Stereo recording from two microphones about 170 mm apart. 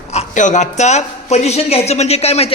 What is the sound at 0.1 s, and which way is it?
A woman's voice, 45° left (ahead or behind).